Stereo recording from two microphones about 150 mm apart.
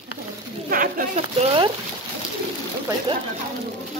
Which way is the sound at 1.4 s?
35° right (ahead or behind).